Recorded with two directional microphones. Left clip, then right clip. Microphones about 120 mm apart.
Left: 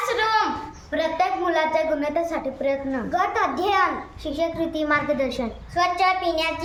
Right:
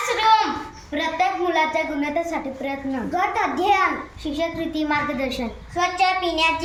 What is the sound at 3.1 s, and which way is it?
Speech, 10° left (ahead or behind).